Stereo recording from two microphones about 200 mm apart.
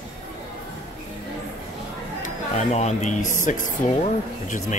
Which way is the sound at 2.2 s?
35° left (ahead or behind).